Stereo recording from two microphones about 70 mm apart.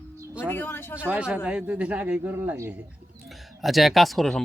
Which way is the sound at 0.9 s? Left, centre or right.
Right.